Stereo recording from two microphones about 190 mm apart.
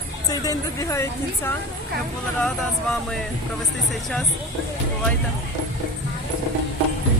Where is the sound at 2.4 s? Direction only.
Centre (ahead or behind).